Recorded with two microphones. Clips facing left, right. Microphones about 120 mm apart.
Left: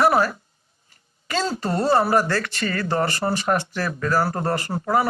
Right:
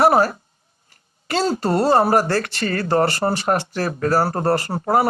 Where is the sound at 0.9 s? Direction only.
55° right (ahead or behind).